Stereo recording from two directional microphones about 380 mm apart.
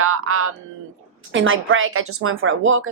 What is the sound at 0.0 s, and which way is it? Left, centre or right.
A woman's voice, right.